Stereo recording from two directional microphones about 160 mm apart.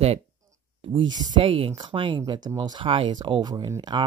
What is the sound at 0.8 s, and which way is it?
Speech, 30° right (ahead or behind).